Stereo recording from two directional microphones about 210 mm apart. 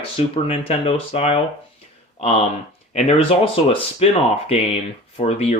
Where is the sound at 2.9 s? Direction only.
30° left (ahead or behind).